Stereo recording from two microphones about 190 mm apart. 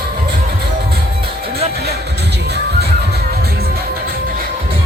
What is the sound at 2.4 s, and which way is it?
Music, 60° right (ahead or behind).